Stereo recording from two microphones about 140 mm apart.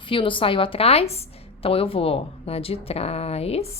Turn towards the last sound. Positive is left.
turn(degrees=45)  # may be behind; listen again after turning